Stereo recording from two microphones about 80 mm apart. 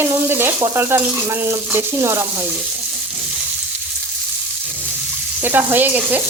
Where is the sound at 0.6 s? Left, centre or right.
Right.